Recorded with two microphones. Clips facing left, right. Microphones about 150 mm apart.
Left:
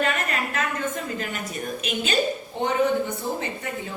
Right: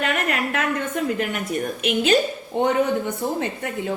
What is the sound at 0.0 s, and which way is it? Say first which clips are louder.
A woman's voice: right 2 dB; 60° right (ahead or behind).